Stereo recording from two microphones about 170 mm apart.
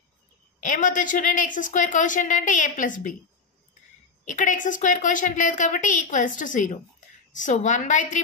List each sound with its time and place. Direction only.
0.6 s a woman's voice: 50° left (ahead or behind)
4.2 s a woman's voice: 45° left (ahead or behind)